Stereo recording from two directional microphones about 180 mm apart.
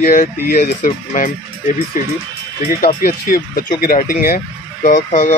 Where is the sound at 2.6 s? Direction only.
55° left (ahead or behind).